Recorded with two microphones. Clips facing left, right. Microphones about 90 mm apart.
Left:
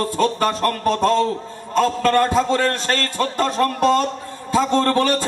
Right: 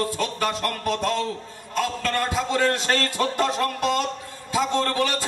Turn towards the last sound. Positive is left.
turn(degrees=40)  # may be behind; listen again after turning